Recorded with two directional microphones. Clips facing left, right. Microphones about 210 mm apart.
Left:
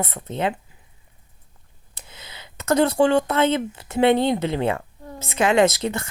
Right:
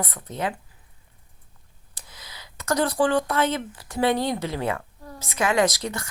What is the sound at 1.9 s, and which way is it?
Speech, 25° left (ahead or behind).